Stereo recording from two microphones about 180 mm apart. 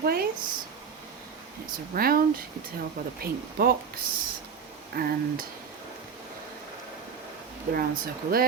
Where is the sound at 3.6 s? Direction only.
55° right (ahead or behind).